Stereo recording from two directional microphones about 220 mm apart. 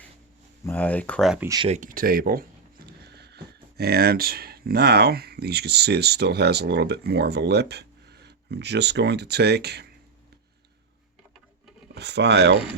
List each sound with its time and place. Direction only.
0.6 s speech: 10° left (ahead or behind)
1.5 s speech: 20° right (ahead or behind)
1.7 s speech: 35° right (ahead or behind)
11.9 s speech: 50° right (ahead or behind)